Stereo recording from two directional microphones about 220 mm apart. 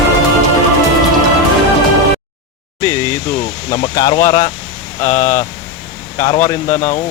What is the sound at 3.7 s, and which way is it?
Speech, 20° left (ahead or behind).